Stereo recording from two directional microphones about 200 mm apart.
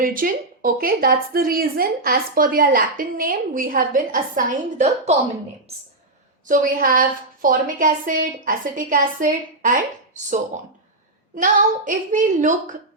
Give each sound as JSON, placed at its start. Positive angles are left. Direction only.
{"t": 0.0, "sound": "a woman's voice", "side_deg": -45}
{"t": 6.5, "sound": "a woman's voice", "side_deg": -45}
{"t": 11.3, "sound": "speech", "side_deg": -40}